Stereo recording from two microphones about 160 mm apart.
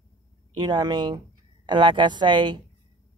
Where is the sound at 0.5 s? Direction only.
30° right (ahead or behind).